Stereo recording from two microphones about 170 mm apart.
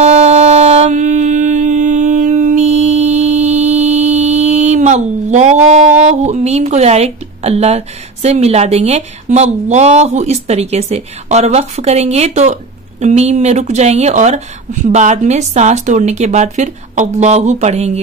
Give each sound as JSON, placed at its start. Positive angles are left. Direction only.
{"t": 0.0, "sound": "music", "side_deg": -40}
{"t": 13.0, "sound": "speech", "side_deg": -40}